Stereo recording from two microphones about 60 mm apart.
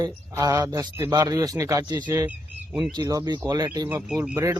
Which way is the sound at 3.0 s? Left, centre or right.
Right.